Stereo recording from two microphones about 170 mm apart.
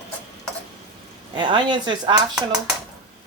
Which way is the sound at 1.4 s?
25° right (ahead or behind).